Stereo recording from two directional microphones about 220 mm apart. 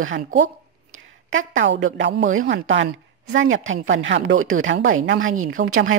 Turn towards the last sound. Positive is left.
turn(degrees=-55)  # may be behind; listen again after turning